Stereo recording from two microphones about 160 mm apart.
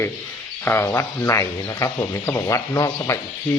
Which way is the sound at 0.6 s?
15° left (ahead or behind).